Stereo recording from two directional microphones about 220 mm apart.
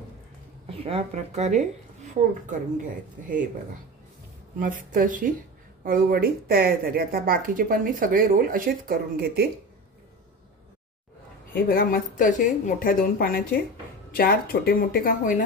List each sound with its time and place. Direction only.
0.7 s a woman's voice: 25° right (ahead or behind)
4.6 s a woman's voice: 40° right (ahead or behind)
11.5 s speech: 40° left (ahead or behind)